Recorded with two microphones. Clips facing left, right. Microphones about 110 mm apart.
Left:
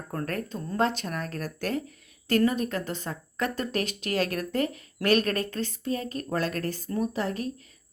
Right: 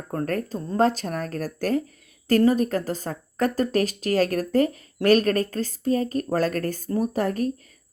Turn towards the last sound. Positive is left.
turn(degrees=-45)  # may be behind; listen again after turning